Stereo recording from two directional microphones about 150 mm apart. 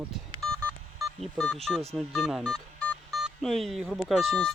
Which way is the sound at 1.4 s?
5° left (ahead or behind).